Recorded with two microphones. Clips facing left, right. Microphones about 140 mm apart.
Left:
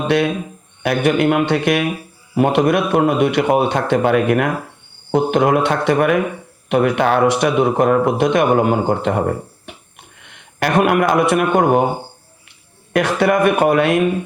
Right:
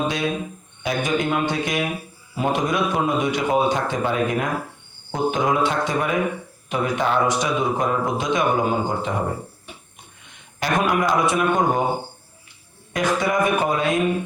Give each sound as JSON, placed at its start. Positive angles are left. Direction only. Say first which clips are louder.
{"t": 0.8, "sound": "a man's voice", "louder": "left 7 dB", "side_deg": 65}
{"t": 12.9, "sound": "speech", "louder": "left 6 dB", "side_deg": 65}